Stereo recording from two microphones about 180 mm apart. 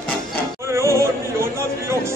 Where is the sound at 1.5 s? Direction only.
15° right (ahead or behind).